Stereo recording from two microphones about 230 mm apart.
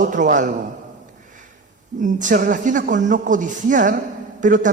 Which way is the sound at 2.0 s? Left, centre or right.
Right.